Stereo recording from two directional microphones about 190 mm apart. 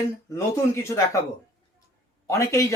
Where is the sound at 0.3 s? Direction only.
15° left (ahead or behind).